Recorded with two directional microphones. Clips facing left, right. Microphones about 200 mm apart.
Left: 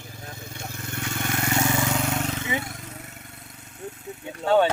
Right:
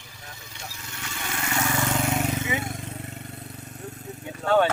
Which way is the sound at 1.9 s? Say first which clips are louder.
Right 1 dB; 5° right (ahead or behind).